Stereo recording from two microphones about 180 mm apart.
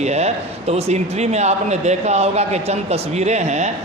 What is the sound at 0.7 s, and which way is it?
Speech, 35° right (ahead or behind).